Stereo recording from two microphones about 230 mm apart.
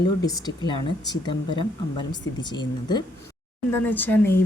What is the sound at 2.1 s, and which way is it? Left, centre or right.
Speech, centre.